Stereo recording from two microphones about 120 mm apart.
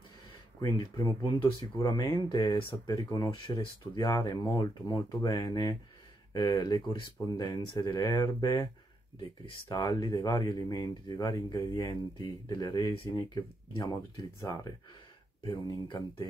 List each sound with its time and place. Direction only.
0.6 s speech: 35° left (ahead or behind)
1.4 s speech: 45° left (ahead or behind)
2.9 s speech: 30° left (ahead or behind)
9.7 s speech: 35° left (ahead or behind)